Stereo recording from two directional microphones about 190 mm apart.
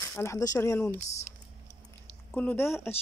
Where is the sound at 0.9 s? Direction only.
35° left (ahead or behind).